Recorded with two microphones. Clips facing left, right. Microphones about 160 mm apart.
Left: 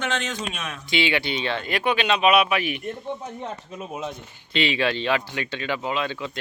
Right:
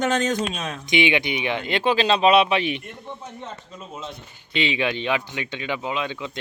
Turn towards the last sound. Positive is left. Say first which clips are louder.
# left 1 dB
turn(degrees=-15)  # may be behind; listen again after turning